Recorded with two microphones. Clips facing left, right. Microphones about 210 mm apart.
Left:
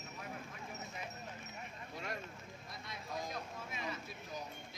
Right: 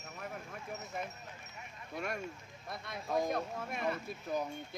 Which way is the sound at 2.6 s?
55° right (ahead or behind).